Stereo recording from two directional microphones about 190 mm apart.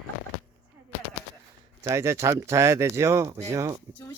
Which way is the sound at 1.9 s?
15° right (ahead or behind).